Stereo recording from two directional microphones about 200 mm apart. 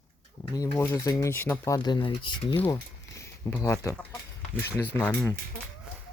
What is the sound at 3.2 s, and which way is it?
Speech, 15° left (ahead or behind).